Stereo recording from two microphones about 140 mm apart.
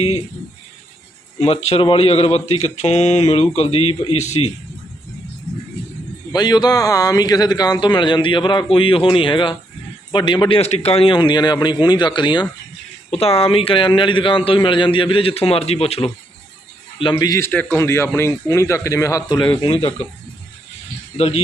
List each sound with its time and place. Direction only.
0.0 s speech: 45° left (ahead or behind)
1.4 s speech: 50° left (ahead or behind)
6.3 s a man's voice: 30° left (ahead or behind)
10.6 s a man's voice: 50° left (ahead or behind)
13.1 s a man's voice: 45° left (ahead or behind)
17.0 s speech: 30° left (ahead or behind)
21.2 s speech: 45° left (ahead or behind)